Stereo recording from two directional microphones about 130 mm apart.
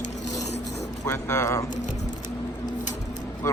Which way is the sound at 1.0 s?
25° left (ahead or behind).